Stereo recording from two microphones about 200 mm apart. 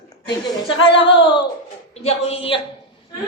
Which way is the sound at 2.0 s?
30° left (ahead or behind).